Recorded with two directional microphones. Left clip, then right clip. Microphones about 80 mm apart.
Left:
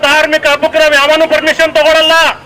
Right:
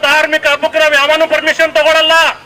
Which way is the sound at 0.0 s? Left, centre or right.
Left.